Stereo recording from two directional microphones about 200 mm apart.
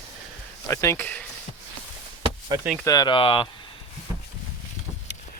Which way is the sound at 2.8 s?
20° left (ahead or behind).